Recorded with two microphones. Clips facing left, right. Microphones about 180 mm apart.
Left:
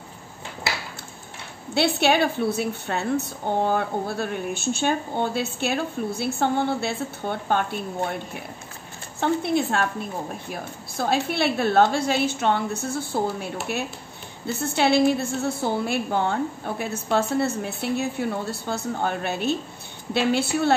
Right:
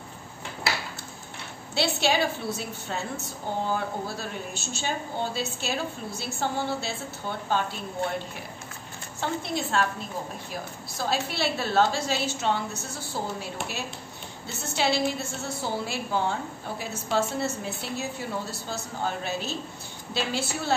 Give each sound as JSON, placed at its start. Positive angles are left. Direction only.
{"t": 1.7, "sound": "a woman's voice", "side_deg": 60}
{"t": 9.2, "sound": "a woman's voice", "side_deg": 60}